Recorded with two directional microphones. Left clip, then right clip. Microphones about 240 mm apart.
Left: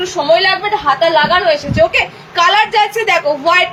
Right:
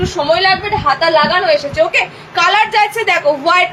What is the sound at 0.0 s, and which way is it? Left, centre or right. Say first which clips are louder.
A woman's voice: left 1 dB; centre.